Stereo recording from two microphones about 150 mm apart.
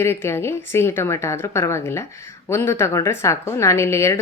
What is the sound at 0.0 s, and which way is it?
A woman's voice, 15° left (ahead or behind).